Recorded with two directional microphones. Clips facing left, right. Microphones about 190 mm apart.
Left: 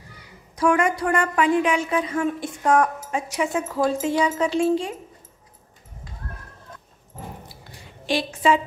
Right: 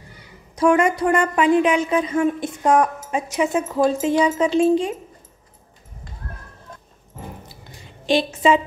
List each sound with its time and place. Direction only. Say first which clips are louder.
0.6 s a woman's voice: right 4 dB; 20° right (ahead or behind)
8.1 s a woman's voice: right 4 dB; 20° right (ahead or behind)